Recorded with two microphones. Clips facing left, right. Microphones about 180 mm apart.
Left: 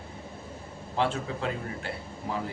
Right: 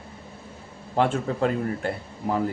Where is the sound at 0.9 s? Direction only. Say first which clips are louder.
Right 5 dB; 50° right (ahead or behind).